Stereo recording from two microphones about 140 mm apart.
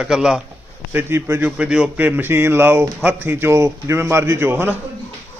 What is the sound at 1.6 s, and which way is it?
A man's voice, 5° right (ahead or behind).